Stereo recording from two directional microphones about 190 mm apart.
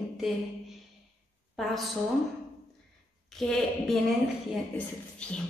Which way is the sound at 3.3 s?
Centre (ahead or behind).